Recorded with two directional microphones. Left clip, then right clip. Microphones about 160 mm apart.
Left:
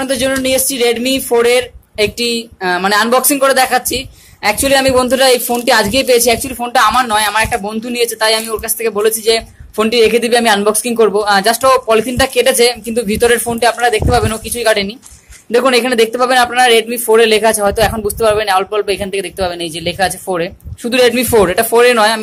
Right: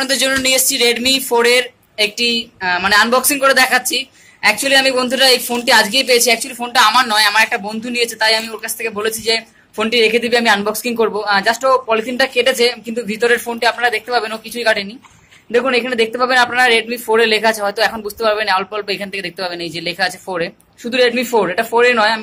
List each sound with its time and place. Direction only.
0.0 s a man's voice: 45° left (ahead or behind)